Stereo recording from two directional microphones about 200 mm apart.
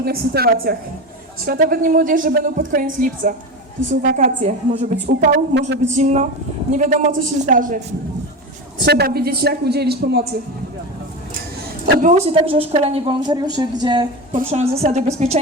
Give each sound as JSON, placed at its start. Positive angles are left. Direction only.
{"t": 0.0, "sound": "a woman's voice", "side_deg": -50}
{"t": 5.5, "sound": "speech", "side_deg": -65}
{"t": 5.9, "sound": "a woman's voice", "side_deg": -35}
{"t": 8.8, "sound": "speech", "side_deg": -55}
{"t": 11.9, "sound": "a woman's voice", "side_deg": -35}